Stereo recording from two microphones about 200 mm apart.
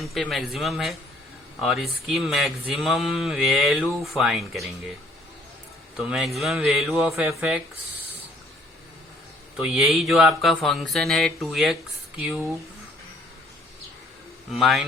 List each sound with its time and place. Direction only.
0.0 s speech: centre (ahead or behind)
6.0 s speech: centre (ahead or behind)
9.6 s speech: 5° right (ahead or behind)
14.5 s speech: centre (ahead or behind)